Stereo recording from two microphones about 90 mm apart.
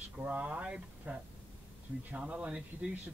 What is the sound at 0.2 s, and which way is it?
Speech, 15° right (ahead or behind).